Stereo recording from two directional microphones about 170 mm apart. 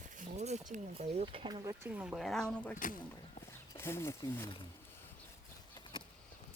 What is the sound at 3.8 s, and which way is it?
Speech, 15° left (ahead or behind).